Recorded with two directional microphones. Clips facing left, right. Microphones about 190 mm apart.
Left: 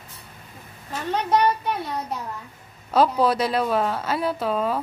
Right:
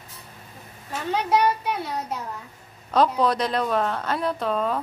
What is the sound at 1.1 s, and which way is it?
Speech, 5° right (ahead or behind).